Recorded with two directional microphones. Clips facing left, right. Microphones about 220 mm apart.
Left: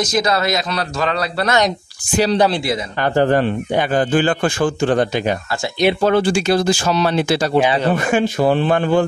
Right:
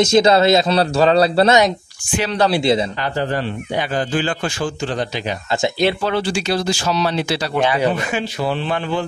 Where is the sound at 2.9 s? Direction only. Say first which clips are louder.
Left 6 dB; 50° left (ahead or behind).